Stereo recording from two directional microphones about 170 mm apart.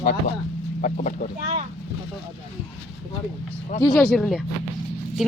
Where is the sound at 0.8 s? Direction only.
45° left (ahead or behind).